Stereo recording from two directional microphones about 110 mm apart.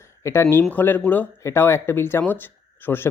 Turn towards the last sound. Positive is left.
turn(degrees=20)  # may be behind; listen again after turning